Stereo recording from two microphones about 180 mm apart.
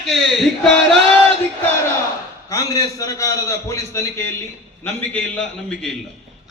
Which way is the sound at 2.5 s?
20° left (ahead or behind).